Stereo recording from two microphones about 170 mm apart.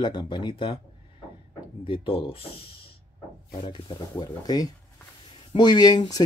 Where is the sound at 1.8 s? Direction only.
30° left (ahead or behind).